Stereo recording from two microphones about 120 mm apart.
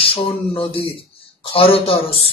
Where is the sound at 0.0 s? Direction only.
50° left (ahead or behind).